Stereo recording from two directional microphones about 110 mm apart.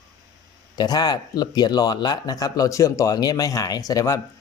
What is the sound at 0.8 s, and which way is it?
Speech, 35° left (ahead or behind).